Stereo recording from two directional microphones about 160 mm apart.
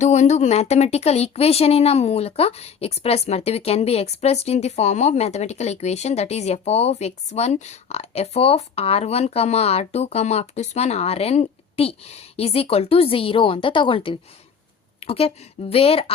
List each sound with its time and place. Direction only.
0.0 s speech: 45° left (ahead or behind)